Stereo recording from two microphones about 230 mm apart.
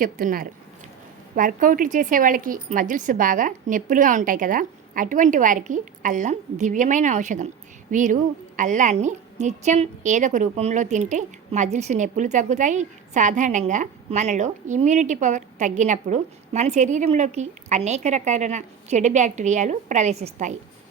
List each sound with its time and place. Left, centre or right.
0.0 s a woman's voice: right